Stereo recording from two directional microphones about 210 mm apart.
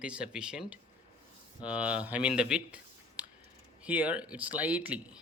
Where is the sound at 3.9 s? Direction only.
5° right (ahead or behind).